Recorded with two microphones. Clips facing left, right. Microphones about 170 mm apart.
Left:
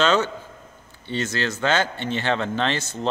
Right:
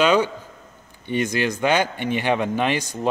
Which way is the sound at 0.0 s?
10° right (ahead or behind).